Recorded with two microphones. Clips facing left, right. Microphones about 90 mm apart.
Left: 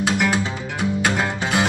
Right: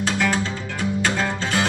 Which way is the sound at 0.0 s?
15° left (ahead or behind).